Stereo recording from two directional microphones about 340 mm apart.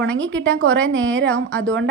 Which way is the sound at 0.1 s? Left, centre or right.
Centre.